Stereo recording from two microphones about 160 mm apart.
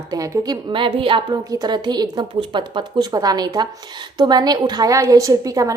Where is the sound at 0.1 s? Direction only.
25° right (ahead or behind).